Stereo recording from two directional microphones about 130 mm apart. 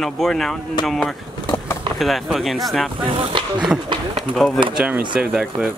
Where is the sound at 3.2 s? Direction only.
40° right (ahead or behind).